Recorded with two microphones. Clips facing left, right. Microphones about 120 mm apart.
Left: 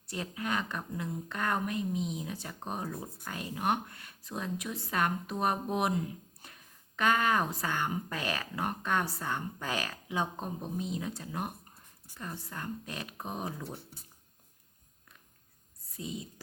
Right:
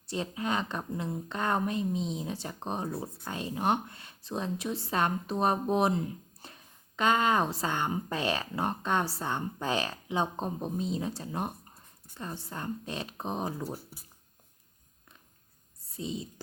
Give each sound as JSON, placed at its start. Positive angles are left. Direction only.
{"t": 0.1, "sound": "speech", "side_deg": -25}
{"t": 13.7, "sound": "speech", "side_deg": -5}
{"t": 16.0, "sound": "speech", "side_deg": -25}